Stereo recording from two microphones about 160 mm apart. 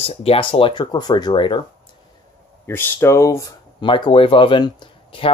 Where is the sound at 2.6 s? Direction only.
15° left (ahead or behind).